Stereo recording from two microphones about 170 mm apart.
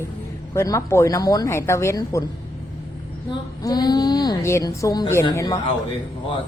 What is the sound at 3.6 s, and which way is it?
Speech, 25° left (ahead or behind).